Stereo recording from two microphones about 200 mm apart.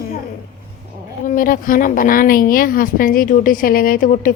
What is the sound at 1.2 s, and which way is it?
A woman's voice, 45° left (ahead or behind).